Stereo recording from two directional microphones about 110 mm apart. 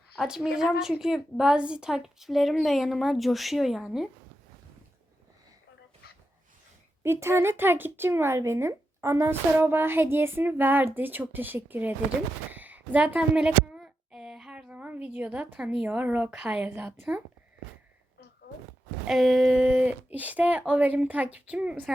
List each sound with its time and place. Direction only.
0.2 s a woman's voice: 5° right (ahead or behind)
7.0 s speech: 25° right (ahead or behind)
12.5 s a sound: 15° right (ahead or behind)
16.4 s a woman's voice: 5° right (ahead or behind)
16.6 s speech: 20° right (ahead or behind)
19.0 s a woman's voice: centre (ahead or behind)